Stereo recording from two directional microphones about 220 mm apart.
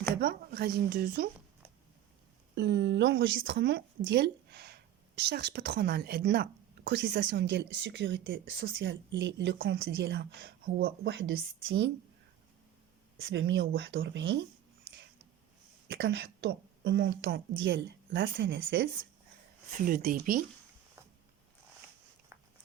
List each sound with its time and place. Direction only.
0.2 s speech: 45° right (ahead or behind)
2.6 s speech: 50° right (ahead or behind)
13.2 s a woman's voice: 55° right (ahead or behind)
15.9 s a woman's voice: 55° right (ahead or behind)
19.8 s speech: 40° right (ahead or behind)